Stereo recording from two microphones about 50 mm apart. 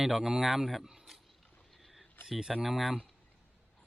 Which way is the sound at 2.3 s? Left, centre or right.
Centre.